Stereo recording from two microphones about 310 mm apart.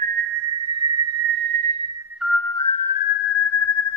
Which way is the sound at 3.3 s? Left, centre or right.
Left.